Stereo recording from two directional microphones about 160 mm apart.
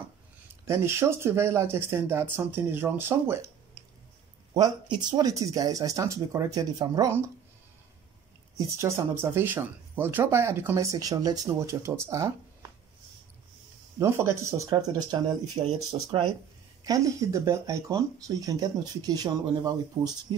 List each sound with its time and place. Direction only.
0.7 s speech: 15° right (ahead or behind)
4.6 s speech: 25° right (ahead or behind)
8.5 s speech: 15° right (ahead or behind)
13.9 s speech: 15° right (ahead or behind); by 16.3 s 35° right (ahead or behind)
16.8 s speech: 20° right (ahead or behind)